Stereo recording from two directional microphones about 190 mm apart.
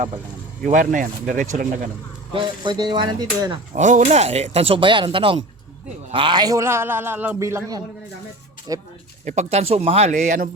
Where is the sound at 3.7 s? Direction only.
40° right (ahead or behind); by 8.8 s 20° right (ahead or behind).